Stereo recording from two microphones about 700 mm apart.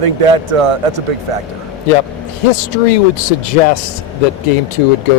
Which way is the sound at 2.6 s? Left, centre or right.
Left.